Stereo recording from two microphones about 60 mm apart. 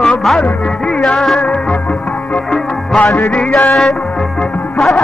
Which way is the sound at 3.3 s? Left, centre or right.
Centre.